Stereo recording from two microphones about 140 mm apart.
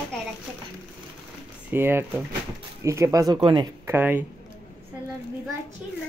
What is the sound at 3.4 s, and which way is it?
Speech, 40° right (ahead or behind).